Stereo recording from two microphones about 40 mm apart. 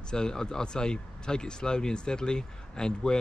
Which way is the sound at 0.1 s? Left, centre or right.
Centre.